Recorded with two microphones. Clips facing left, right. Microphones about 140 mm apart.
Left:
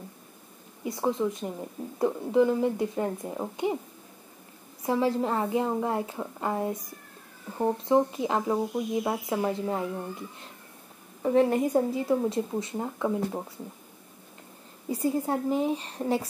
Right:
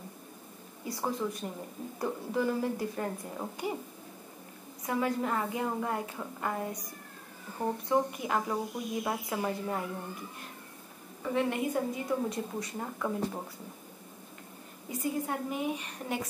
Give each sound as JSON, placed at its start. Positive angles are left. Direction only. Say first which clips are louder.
{"t": 0.8, "sound": "speech", "louder": "left 6 dB", "side_deg": 20}
{"t": 4.8, "sound": "speech", "louder": "left 5 dB", "side_deg": 25}
{"t": 11.2, "sound": "speech", "louder": "left 7 dB", "side_deg": 40}
{"t": 14.9, "sound": "a woman's voice", "louder": "left 6 dB", "side_deg": 35}